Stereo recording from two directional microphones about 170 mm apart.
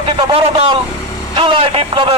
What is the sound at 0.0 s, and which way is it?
A man's voice, 30° right (ahead or behind).